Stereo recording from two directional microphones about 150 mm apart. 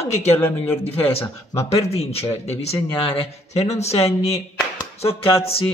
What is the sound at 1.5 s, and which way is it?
A man's voice, 45° left (ahead or behind).